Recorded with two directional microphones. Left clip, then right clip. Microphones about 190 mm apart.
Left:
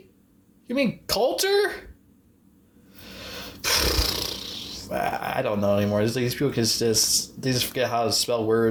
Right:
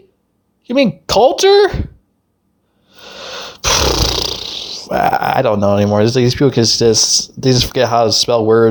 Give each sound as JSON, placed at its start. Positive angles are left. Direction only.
{"t": 0.7, "sound": "speech", "side_deg": -45}
{"t": 2.9, "sound": "roar", "side_deg": -45}